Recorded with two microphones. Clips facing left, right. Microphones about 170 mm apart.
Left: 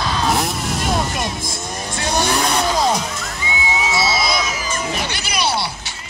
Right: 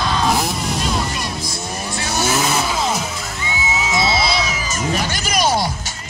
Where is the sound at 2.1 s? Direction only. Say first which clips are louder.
Left 1 dB; 5° right (ahead or behind).